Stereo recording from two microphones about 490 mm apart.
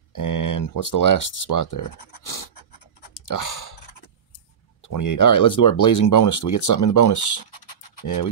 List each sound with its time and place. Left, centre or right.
0.1 s speech: left
3.3 s a sound: left
4.8 s speech: left